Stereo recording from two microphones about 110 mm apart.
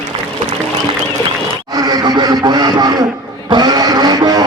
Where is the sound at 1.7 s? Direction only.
35° right (ahead or behind).